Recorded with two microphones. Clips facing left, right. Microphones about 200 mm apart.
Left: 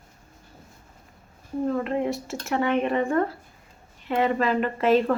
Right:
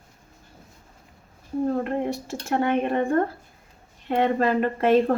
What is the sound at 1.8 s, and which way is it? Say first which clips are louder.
Speech: even; 55° right (ahead or behind).